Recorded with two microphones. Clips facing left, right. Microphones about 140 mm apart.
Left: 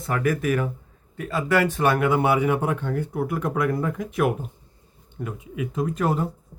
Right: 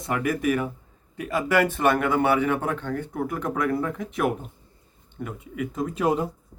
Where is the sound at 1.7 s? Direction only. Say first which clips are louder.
Left 1 dB; centre (ahead or behind).